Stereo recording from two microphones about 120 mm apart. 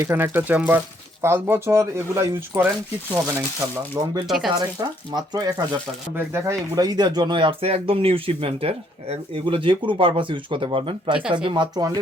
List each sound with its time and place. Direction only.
0.0 s speech: 20° right (ahead or behind)
4.0 s speech: 25° right (ahead or behind)
4.3 s speech: centre (ahead or behind)
4.8 s speech: 35° right (ahead or behind)
6.1 s speech: 25° right (ahead or behind); by 11.1 s 45° right (ahead or behind)
11.1 s speech: 5° right (ahead or behind)
11.4 s speech: 40° right (ahead or behind)